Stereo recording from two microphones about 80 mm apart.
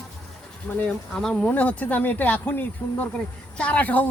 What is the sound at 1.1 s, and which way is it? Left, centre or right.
Speech, centre.